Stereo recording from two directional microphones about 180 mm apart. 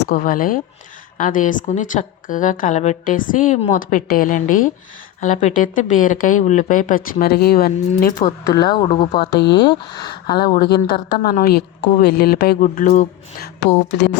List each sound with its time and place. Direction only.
0.0 s a woman's voice: 55° left (ahead or behind)
8.2 s speech: 25° left (ahead or behind)
9.4 s speech: 70° left (ahead or behind)
9.6 s speech: 25° left (ahead or behind)
10.3 s a woman's voice: 60° left (ahead or behind)
13.6 s speech: 70° left (ahead or behind)